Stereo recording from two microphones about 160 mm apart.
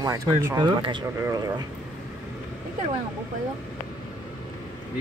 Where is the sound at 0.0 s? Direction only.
20° right (ahead or behind).